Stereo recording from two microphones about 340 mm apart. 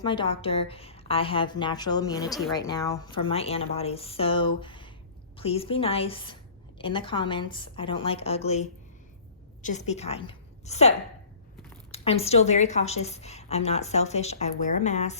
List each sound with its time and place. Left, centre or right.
0.0 s a woman's voice: centre